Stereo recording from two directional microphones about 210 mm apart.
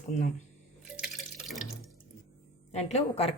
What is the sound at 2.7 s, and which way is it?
Speech, 30° left (ahead or behind).